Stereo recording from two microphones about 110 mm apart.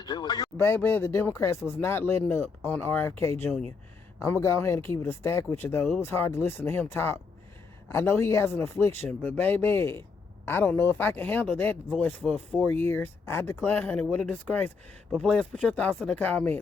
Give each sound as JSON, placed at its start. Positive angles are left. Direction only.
{"t": 0.0, "sound": "a sound", "side_deg": 40}
{"t": 0.5, "sound": "speech", "side_deg": 20}
{"t": 15.1, "sound": "speech", "side_deg": 0}
{"t": 15.4, "sound": "speech", "side_deg": 10}